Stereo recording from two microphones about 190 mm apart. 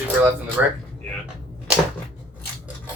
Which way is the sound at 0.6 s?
10° right (ahead or behind).